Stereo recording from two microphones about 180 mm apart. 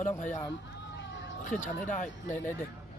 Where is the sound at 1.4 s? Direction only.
45° left (ahead or behind).